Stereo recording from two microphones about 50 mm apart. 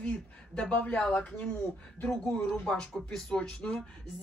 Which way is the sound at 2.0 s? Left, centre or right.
Centre.